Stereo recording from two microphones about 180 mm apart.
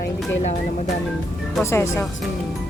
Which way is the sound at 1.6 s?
15° left (ahead or behind).